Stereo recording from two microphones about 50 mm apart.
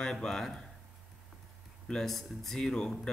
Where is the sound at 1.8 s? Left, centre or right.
Centre.